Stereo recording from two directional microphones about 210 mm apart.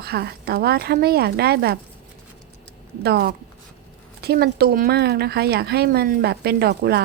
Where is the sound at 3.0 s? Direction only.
50° right (ahead or behind).